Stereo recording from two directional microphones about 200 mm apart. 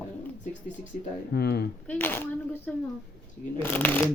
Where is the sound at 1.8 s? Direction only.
10° left (ahead or behind).